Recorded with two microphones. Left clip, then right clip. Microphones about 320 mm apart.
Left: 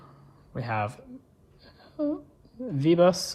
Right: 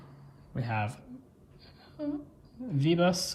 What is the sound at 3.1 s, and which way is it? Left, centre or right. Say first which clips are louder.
Speech: left 6 dB; centre.